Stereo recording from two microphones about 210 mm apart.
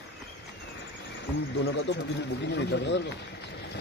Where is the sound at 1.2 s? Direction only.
65° left (ahead or behind).